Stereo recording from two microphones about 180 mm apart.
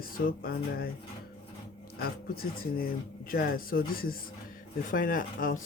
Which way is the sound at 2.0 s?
55° left (ahead or behind).